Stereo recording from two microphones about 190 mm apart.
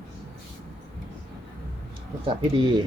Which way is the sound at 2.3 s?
25° right (ahead or behind).